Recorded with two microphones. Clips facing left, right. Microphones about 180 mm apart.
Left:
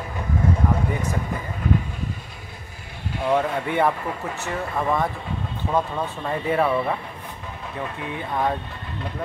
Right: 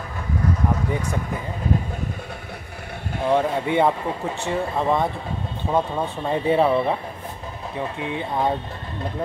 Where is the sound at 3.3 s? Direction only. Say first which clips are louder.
Right 2 dB; 20° right (ahead or behind).